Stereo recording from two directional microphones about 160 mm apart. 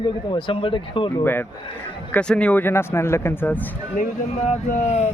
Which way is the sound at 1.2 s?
10° left (ahead or behind).